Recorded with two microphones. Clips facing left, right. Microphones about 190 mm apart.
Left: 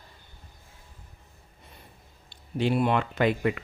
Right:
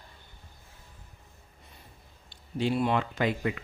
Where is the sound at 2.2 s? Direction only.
60° left (ahead or behind).